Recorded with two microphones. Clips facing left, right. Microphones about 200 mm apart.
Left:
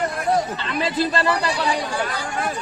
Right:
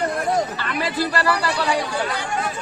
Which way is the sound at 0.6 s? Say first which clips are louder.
Left 1 dB; 20° left (ahead or behind).